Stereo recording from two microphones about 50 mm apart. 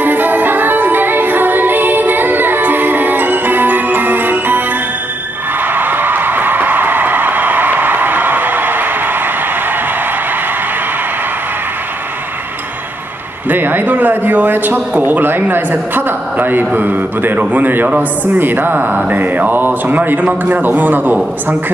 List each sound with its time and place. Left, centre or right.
0.0 s music: right
13.5 s a man's voice: right